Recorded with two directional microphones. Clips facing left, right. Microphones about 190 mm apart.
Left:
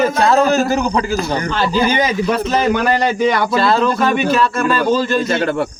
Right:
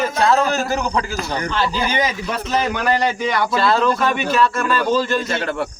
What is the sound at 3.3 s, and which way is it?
Speech, 50° left (ahead or behind).